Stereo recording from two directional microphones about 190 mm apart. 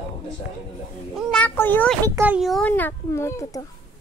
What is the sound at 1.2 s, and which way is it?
Speech, 5° left (ahead or behind).